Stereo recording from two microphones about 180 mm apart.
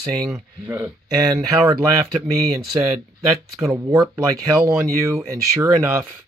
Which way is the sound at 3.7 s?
20° right (ahead or behind).